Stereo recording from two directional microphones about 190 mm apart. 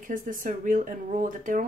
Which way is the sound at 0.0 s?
45° right (ahead or behind).